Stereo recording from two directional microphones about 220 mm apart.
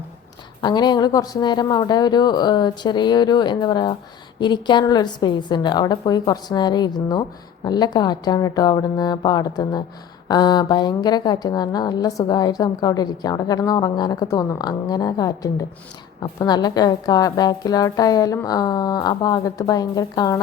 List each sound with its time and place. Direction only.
0.6 s a woman's voice: 20° left (ahead or behind)